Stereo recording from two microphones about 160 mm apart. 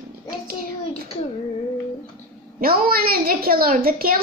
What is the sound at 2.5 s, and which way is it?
A woman's voice, 65° right (ahead or behind).